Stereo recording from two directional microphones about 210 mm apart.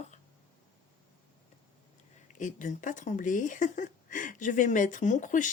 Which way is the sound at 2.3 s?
35° left (ahead or behind).